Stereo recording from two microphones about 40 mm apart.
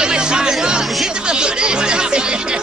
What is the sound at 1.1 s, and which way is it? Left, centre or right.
Speech, right.